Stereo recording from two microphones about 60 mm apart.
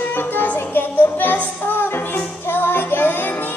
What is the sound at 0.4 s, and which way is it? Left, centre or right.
Child singing, left.